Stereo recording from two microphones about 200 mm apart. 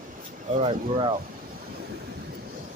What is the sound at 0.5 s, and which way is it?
Speech, 25° right (ahead or behind).